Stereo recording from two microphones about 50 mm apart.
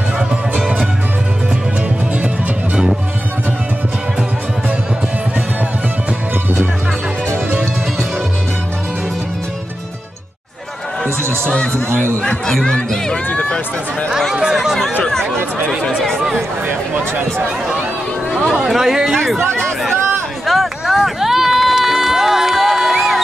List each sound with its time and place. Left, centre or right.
0.6 s music: right
2.1 s music: right
11.4 s a sound: centre
12.4 s speech: centre
13.3 s run: left
14.0 s speech: centre
16.6 s a sound: right
18.3 s a sound: centre
18.6 s speech: centre
19.1 s speech: centre
20.5 s a sound: centre
20.8 s run: centre